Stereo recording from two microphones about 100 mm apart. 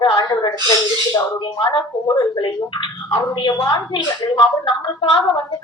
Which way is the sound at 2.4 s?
55° left (ahead or behind).